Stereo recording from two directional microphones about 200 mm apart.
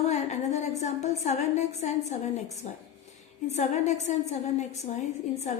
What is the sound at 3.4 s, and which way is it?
A woman's voice, 35° left (ahead or behind).